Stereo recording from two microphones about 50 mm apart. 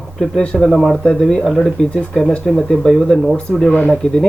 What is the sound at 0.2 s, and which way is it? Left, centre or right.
Speech, centre.